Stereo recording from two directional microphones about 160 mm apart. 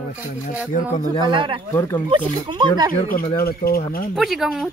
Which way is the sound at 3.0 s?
65° left (ahead or behind).